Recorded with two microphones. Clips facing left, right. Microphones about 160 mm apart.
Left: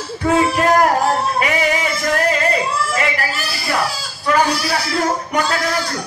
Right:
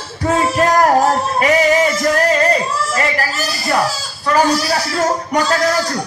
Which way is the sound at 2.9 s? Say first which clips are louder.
Right 2 dB; 40° right (ahead or behind).